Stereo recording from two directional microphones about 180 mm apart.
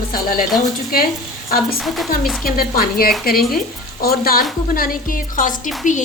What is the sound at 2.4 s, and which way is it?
A woman's voice, 55° left (ahead or behind).